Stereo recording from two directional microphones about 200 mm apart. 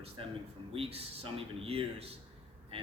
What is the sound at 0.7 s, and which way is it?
A man's voice, 30° right (ahead or behind).